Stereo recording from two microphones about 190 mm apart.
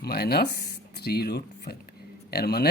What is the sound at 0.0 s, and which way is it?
Speech, 55° left (ahead or behind).